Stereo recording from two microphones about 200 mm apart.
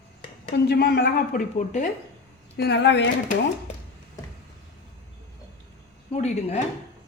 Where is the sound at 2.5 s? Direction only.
55° left (ahead or behind).